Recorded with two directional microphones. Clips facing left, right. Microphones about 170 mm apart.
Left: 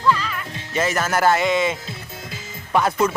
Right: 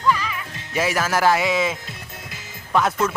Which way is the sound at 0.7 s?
10° right (ahead or behind).